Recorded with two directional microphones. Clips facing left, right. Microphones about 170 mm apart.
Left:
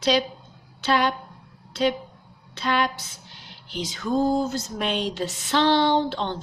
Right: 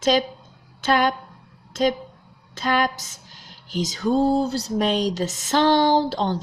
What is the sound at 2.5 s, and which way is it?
Female singing, 45° right (ahead or behind).